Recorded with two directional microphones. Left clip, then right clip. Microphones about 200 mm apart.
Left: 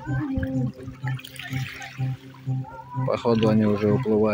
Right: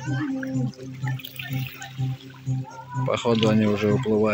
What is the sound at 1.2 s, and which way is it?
Water, 30° left (ahead or behind).